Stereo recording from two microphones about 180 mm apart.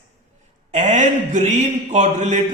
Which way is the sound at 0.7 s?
40° right (ahead or behind).